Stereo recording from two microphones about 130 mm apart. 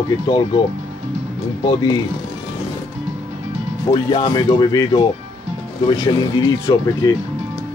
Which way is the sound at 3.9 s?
40° left (ahead or behind).